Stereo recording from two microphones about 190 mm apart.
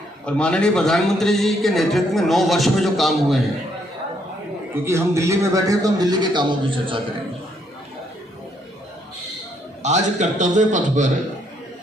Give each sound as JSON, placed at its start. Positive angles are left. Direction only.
{"t": 0.3, "sound": "a man's voice", "side_deg": 5}
{"t": 4.7, "sound": "a man's voice", "side_deg": -15}
{"t": 9.8, "sound": "a man's voice", "side_deg": -40}